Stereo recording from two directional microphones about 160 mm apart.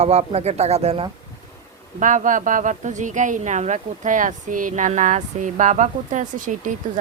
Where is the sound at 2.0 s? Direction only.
55° right (ahead or behind).